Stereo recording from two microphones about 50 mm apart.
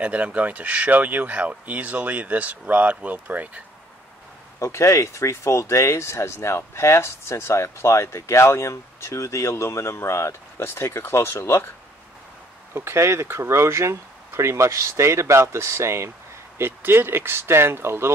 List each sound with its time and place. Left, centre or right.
0.0 s speech: right
4.6 s speech: left
10.6 s speech: left
12.7 s speech: right
16.5 s speech: right